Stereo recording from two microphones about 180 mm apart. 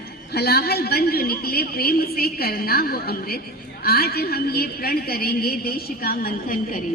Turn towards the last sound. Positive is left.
turn(degrees=50)  # may be behind; listen again after turning